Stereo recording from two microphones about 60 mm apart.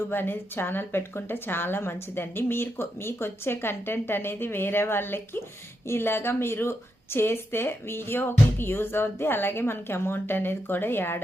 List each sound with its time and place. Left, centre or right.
0.1 s a woman's voice: left